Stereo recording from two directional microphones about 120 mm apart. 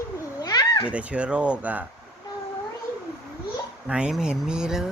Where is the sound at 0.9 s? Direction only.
10° right (ahead or behind).